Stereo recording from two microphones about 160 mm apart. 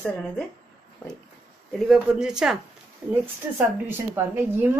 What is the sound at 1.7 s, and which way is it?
A woman's voice, 5° right (ahead or behind).